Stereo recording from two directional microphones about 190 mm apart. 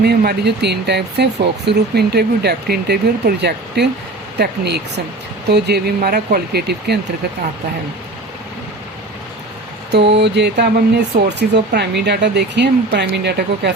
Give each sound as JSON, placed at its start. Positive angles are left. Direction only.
{"t": 0.0, "sound": "speech", "side_deg": -60}
{"t": 9.9, "sound": "speech", "side_deg": -65}